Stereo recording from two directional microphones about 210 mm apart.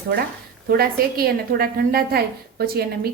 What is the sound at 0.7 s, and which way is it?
A woman's voice, 45° right (ahead or behind).